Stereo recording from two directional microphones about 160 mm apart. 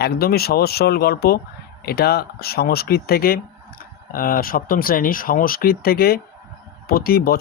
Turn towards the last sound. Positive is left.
turn(degrees=70)  # may be behind; listen again after turning